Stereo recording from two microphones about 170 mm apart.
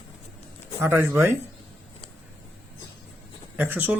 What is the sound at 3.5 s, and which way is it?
Speech, 10° right (ahead or behind).